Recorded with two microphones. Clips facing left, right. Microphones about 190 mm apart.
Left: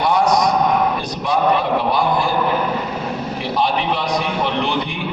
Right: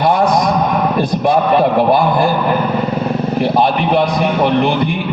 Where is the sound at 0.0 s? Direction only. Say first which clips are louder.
Right 3 dB; 55° right (ahead or behind).